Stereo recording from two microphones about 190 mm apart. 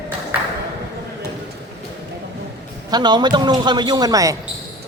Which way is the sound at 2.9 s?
20° right (ahead or behind).